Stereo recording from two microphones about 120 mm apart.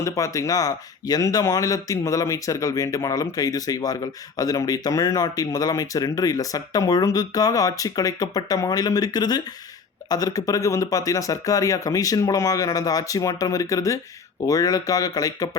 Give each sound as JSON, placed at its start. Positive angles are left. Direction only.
{"t": 0.0, "sound": "speech", "side_deg": 25}